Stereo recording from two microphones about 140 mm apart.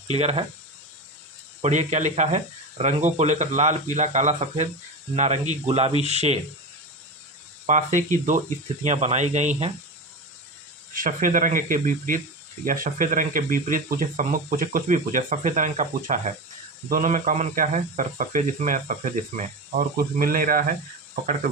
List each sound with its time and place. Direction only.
0.1 s speech: 50° right (ahead or behind)
1.6 s speech: 55° right (ahead or behind)
7.7 s speech: 65° right (ahead or behind)
10.9 s speech: 80° right
12.6 s speech: 85° right